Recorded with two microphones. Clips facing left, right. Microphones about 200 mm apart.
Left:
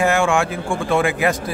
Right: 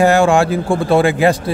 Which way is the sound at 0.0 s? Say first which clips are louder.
Right 6 dB; 35° right (ahead or behind).